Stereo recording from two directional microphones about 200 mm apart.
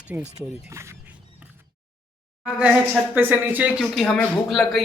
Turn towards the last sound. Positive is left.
turn(degrees=0)  # may be behind; listen again after turning